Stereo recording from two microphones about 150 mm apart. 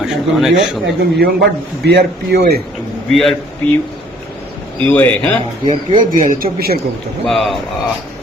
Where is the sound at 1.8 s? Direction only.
90° right.